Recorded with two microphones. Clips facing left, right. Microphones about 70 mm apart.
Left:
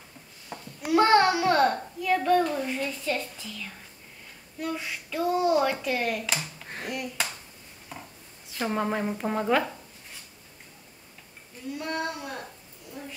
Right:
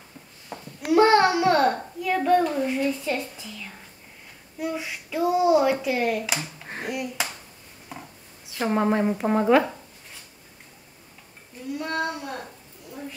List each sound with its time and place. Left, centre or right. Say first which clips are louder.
0.5 s babbling: right 2 dB; centre
0.8 s a child's voice: right 3 dB; centre
8.5 s a child's voice: right 5 dB; centre
11.8 s speech: right 3 dB; centre